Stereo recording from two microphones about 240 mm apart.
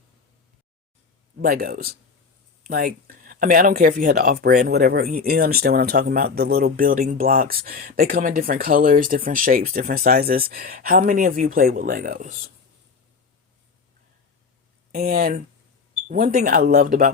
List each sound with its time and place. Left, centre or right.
1.4 s speech: right
14.9 s speech: right